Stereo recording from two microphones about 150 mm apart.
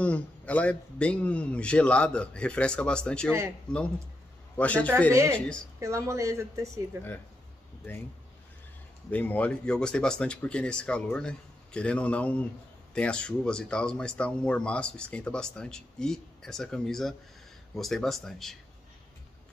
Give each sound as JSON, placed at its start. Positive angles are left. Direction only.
{"t": 0.0, "sound": "speech", "side_deg": 10}
{"t": 3.3, "sound": "speech", "side_deg": -20}
{"t": 4.6, "sound": "speech", "side_deg": 10}
{"t": 5.1, "sound": "speech", "side_deg": -15}
{"t": 9.1, "sound": "speech", "side_deg": 10}